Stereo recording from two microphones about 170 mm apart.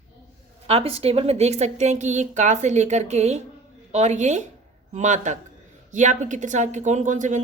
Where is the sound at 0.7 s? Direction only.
35° right (ahead or behind).